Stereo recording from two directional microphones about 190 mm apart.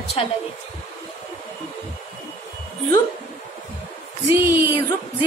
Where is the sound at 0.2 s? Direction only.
30° left (ahead or behind).